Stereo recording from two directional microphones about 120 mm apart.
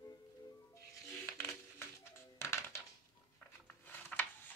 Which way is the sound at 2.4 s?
20° left (ahead or behind).